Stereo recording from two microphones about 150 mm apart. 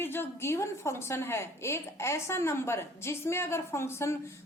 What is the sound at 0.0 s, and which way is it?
A woman's voice, 15° left (ahead or behind).